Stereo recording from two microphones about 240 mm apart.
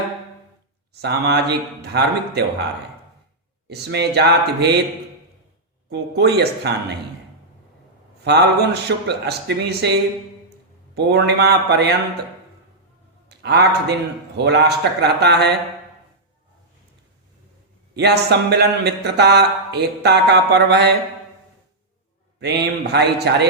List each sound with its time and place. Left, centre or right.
1.0 s speech: right
3.7 s speech: right
5.9 s speech: right
8.2 s speech: right
13.2 s a man's voice: right
17.9 s speech: right
22.4 s speech: right